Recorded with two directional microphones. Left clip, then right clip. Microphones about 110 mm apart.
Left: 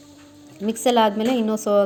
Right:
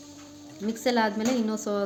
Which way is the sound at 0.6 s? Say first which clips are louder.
Left 7 dB; 60° left (ahead or behind).